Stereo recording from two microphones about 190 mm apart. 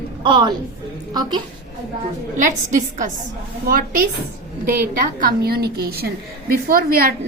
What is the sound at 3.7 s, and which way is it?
A woman's voice, 50° right (ahead or behind).